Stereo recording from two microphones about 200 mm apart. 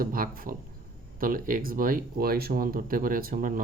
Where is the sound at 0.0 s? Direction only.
45° right (ahead or behind).